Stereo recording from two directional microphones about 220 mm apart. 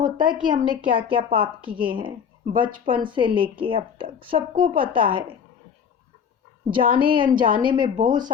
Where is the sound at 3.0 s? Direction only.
20° right (ahead or behind).